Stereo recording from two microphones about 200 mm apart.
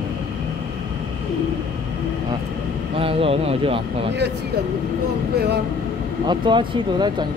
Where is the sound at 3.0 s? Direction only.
25° right (ahead or behind).